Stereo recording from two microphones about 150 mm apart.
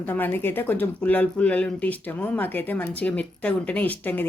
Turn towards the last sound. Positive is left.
turn(degrees=10)  # may be behind; listen again after turning